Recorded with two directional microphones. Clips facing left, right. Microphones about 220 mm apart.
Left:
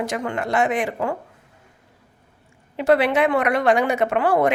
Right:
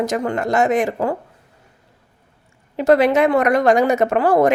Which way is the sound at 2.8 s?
40° right (ahead or behind).